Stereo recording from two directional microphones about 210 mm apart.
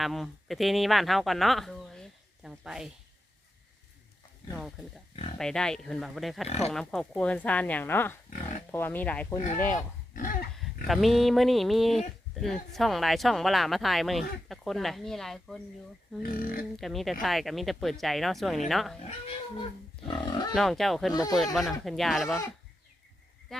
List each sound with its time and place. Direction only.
0.0 s speech: centre (ahead or behind)
4.5 s speech: centre (ahead or behind)
10.2 s a sound: 40° left (ahead or behind)
10.6 s speech: centre (ahead or behind)
16.3 s speech: 45° left (ahead or behind)
16.7 s speech: centre (ahead or behind)
20.1 s speech: 20° left (ahead or behind)
20.5 s speech: centre (ahead or behind)
21.1 s speech: 15° left (ahead or behind)
21.3 s speech: centre (ahead or behind)
23.5 s speech: centre (ahead or behind)